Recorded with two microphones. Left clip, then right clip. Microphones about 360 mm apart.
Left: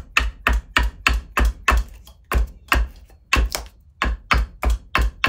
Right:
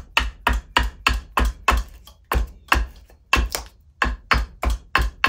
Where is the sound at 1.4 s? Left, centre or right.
Centre.